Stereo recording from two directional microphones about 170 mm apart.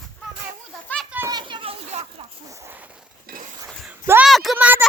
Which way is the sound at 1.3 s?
30° right (ahead or behind).